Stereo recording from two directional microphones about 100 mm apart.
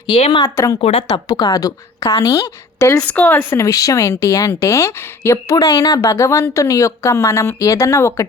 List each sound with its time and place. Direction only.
0.2 s speech: 80° left
0.4 s a woman's voice: 35° left (ahead or behind)
0.8 s speech: 80° left
1.5 s a woman's voice: 35° left (ahead or behind)
3.1 s speech: 15° left (ahead or behind)
3.6 s a woman's voice: 35° left (ahead or behind)
5.5 s a woman's voice: 40° left (ahead or behind)